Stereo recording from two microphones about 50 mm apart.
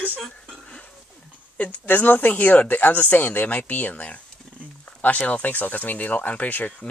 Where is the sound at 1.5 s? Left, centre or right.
Left.